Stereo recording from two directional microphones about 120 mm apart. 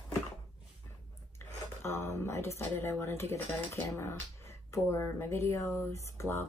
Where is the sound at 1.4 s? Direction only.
15° left (ahead or behind).